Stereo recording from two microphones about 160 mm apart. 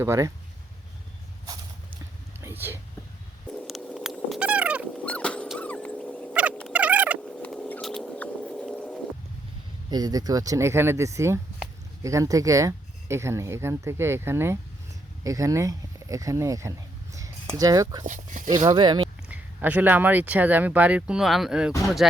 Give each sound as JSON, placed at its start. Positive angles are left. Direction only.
{"t": 0.0, "sound": "speech", "side_deg": -15}
{"t": 2.4, "sound": "a sound", "side_deg": -15}
{"t": 3.7, "sound": "cat", "side_deg": 0}
{"t": 5.0, "sound": "dog", "side_deg": 5}
{"t": 6.7, "sound": "a sound", "side_deg": -10}
{"t": 7.2, "sound": "patter", "side_deg": 5}
{"t": 9.9, "sound": "speech", "side_deg": -25}
{"t": 18.0, "sound": "speech", "side_deg": -50}
{"t": 18.5, "sound": "speech", "side_deg": -25}
{"t": 19.3, "sound": "speech", "side_deg": -10}